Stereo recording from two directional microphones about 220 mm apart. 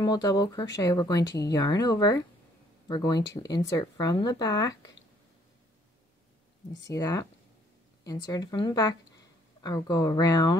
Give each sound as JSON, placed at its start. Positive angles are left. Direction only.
{"t": 0.0, "sound": "speech", "side_deg": 15}
{"t": 6.9, "sound": "a woman's voice", "side_deg": 15}